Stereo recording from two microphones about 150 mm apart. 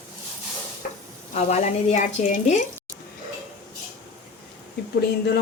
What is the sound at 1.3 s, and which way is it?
Speech, 50° left (ahead or behind).